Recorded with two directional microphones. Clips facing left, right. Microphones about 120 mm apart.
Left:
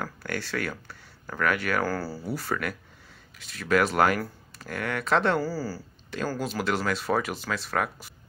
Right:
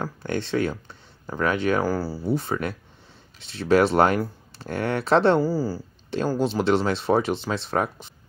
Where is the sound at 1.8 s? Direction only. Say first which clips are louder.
Right 5 dB; 15° right (ahead or behind).